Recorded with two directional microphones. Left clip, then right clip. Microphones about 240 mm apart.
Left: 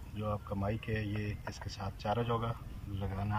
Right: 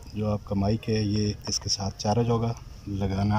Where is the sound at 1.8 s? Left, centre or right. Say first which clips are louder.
Right 3 dB; right.